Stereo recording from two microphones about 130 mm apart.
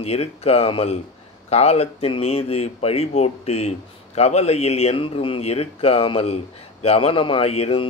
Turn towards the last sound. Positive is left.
turn(degrees=50)  # may be behind; listen again after turning